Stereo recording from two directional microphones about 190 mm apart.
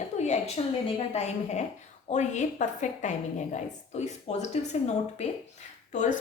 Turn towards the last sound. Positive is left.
turn(degrees=40)  # may be behind; listen again after turning